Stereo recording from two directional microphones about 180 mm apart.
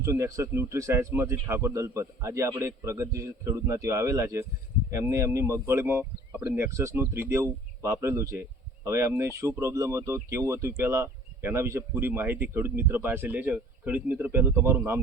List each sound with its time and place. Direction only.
0.0 s speech: 15° right (ahead or behind)